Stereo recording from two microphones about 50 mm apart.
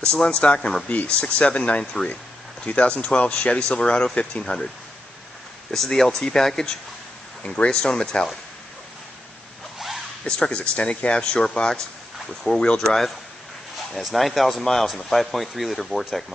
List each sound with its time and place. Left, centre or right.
0.3 s speech: left
1.2 s speech: centre
5.7 s speech: centre
10.2 s speech: centre
13.9 s speech: centre